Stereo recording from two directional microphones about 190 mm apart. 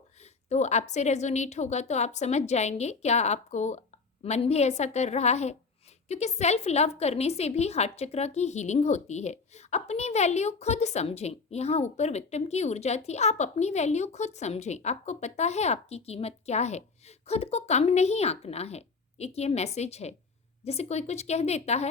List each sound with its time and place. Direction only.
0.4 s a woman's voice: 35° left (ahead or behind)